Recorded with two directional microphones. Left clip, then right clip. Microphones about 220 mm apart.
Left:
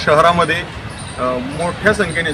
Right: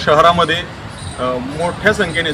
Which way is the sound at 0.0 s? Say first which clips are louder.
Right 1 dB; 5° left (ahead or behind).